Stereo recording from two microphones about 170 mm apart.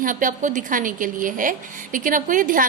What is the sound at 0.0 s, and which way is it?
A woman's voice, 50° right (ahead or behind).